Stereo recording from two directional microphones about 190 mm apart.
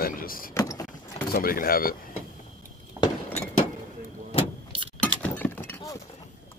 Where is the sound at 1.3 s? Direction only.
50° left (ahead or behind).